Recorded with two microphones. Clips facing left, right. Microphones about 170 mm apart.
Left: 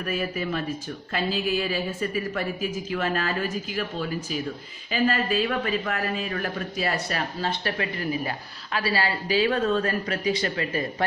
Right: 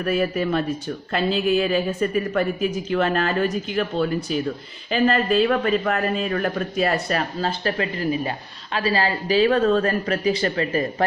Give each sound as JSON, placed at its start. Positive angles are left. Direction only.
{"t": 0.0, "sound": "a woman's voice", "side_deg": -40}
{"t": 1.1, "sound": "speech", "side_deg": -50}
{"t": 2.9, "sound": "a woman's voice", "side_deg": -60}
{"t": 5.0, "sound": "speech", "side_deg": -55}
{"t": 7.4, "sound": "a woman's voice", "side_deg": -30}